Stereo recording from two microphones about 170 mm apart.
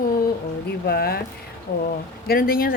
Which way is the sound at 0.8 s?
65° left (ahead or behind).